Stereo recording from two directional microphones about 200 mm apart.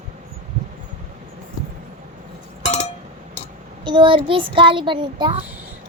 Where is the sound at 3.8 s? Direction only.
25° right (ahead or behind).